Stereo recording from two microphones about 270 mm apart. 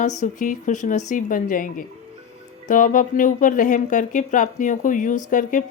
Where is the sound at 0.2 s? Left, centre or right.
Left.